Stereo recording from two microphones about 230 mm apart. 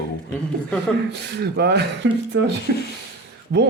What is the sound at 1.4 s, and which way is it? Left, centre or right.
Speech, right.